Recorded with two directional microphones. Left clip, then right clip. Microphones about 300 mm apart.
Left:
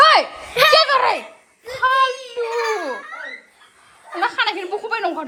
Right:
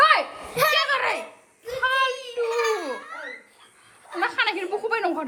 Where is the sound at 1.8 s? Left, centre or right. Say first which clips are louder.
Left 6 dB; centre.